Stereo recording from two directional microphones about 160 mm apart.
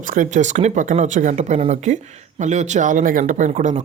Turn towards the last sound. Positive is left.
turn(degrees=-50)  # may be behind; listen again after turning